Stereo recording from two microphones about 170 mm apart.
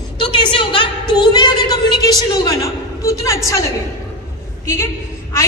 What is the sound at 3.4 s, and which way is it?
Speech, 20° left (ahead or behind).